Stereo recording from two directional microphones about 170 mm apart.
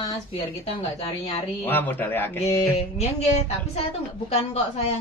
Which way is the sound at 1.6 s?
10° left (ahead or behind).